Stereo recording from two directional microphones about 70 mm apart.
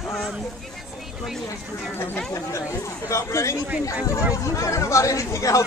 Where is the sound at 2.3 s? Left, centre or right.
Left.